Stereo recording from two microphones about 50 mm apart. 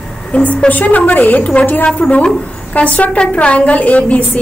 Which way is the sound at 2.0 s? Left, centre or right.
Centre.